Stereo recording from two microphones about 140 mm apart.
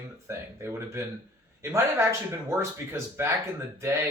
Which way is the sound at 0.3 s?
20° right (ahead or behind).